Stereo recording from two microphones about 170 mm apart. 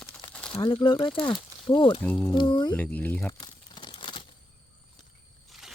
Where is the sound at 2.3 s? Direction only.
25° left (ahead or behind).